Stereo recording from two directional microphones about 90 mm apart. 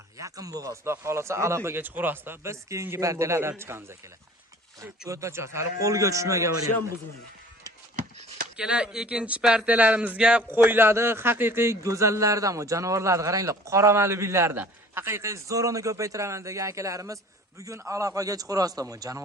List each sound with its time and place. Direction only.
0.2 s a man's voice: 40° right (ahead or behind)
8.5 s speech: 10° right (ahead or behind)
9.6 s a man's voice: 15° right (ahead or behind); by 19.2 s 40° right (ahead or behind)